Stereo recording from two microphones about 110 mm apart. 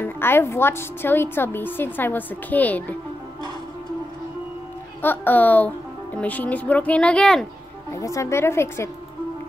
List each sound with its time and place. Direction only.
0.0 s a woman's voice: 20° left (ahead or behind)
5.0 s a woman's voice: 15° left (ahead or behind)
7.9 s a woman's voice: 30° left (ahead or behind)